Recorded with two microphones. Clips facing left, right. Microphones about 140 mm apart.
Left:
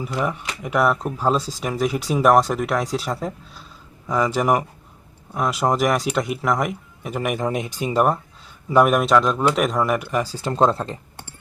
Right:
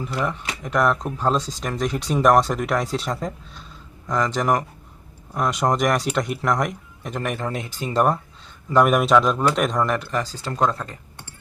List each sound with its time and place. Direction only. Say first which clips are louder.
0.0 s speech: left 1 dB; 10° left (ahead or behind)
8.7 s speech: left 1 dB; centre (ahead or behind)
10.5 s speech: left 4 dB; 30° left (ahead or behind)